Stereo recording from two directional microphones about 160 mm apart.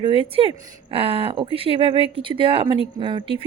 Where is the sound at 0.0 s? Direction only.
35° right (ahead or behind).